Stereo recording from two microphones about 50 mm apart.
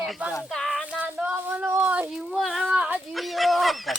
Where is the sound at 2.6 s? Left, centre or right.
Centre.